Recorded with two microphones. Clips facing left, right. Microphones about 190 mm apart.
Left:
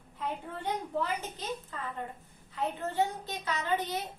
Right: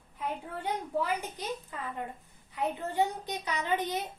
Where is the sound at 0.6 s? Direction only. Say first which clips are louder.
Right 1 dB; 10° right (ahead or behind).